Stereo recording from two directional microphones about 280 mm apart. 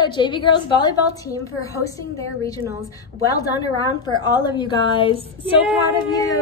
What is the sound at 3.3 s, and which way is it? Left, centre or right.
A woman's voice, centre.